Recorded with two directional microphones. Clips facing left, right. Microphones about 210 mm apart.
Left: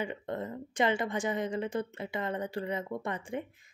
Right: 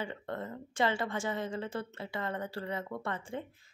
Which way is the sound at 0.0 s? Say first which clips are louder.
Left 3 dB; 15° left (ahead or behind).